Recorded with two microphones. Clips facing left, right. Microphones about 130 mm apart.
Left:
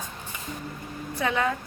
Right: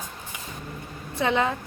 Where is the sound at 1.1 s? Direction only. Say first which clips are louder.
Right 3 dB; 25° right (ahead or behind).